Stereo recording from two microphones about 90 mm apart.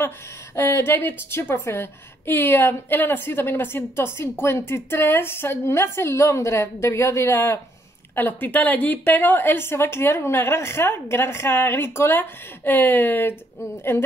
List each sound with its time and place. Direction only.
0.6 s a woman's voice: 25° left (ahead or behind)